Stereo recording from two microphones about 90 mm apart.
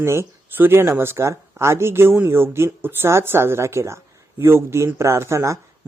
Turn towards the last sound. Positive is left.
turn(degrees=-30)  # may be behind; listen again after turning